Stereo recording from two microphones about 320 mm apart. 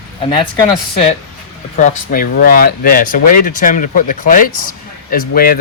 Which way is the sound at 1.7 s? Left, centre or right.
Left.